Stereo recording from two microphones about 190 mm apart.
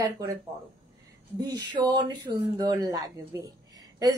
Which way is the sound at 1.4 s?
20° right (ahead or behind).